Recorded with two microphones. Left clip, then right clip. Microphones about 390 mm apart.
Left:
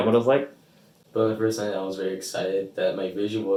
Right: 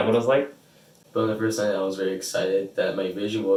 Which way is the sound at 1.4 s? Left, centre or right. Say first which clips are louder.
Right 2 dB; centre.